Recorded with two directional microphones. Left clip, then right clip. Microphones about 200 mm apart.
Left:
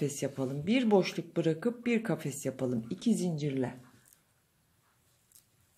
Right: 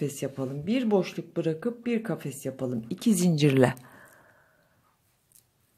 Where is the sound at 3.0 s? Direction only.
30° right (ahead or behind).